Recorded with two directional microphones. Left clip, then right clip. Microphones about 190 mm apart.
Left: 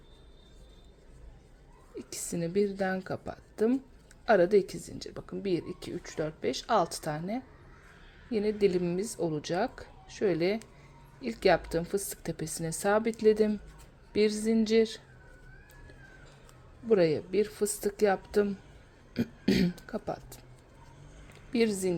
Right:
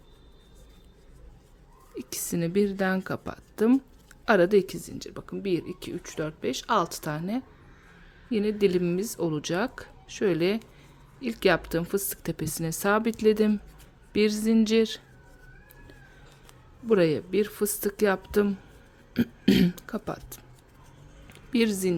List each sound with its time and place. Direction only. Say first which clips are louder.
2.0 s speech: right 4 dB; 25° right (ahead or behind)
16.9 s a woman's voice: right 2 dB; 25° right (ahead or behind)